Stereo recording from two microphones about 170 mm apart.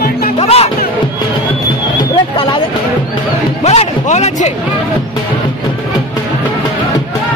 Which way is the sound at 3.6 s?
40° left (ahead or behind).